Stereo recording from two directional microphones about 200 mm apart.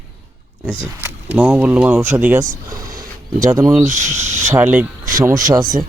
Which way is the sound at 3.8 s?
35° right (ahead or behind).